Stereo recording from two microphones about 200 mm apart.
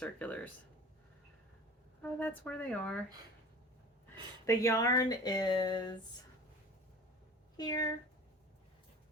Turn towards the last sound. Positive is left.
turn(degrees=20)  # may be behind; listen again after turning